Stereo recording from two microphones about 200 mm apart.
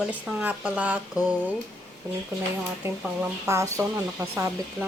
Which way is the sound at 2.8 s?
15° right (ahead or behind).